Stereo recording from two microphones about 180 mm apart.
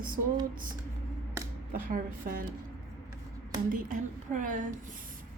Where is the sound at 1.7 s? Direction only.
50° right (ahead or behind).